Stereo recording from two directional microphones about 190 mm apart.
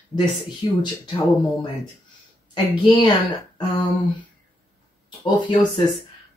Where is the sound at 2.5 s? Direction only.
25° left (ahead or behind).